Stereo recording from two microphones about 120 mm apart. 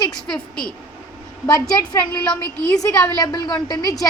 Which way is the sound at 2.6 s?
30° left (ahead or behind).